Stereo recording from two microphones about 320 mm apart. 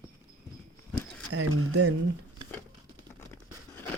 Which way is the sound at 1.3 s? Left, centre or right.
Right.